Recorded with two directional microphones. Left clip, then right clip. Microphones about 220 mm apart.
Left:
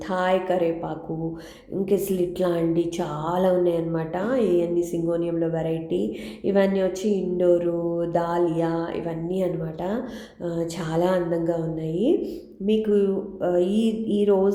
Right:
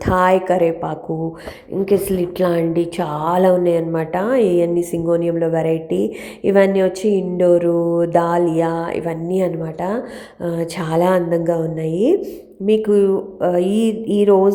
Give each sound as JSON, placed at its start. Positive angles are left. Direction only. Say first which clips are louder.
{"t": 0.0, "sound": "a woman's voice", "louder": "right 8 dB", "side_deg": -30}